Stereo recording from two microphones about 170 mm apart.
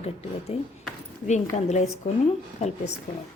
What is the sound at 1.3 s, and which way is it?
A woman's voice, 40° left (ahead or behind).